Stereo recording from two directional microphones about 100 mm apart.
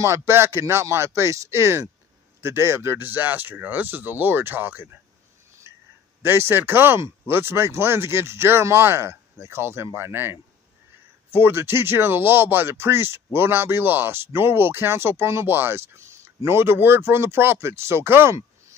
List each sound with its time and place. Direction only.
0.0 s speech: 25° right (ahead or behind)
6.2 s speech: 25° right (ahead or behind)